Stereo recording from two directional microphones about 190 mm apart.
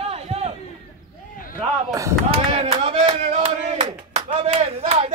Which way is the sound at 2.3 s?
30° right (ahead or behind).